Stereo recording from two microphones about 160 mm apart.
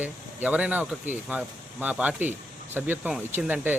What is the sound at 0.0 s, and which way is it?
Speech, 10° right (ahead or behind).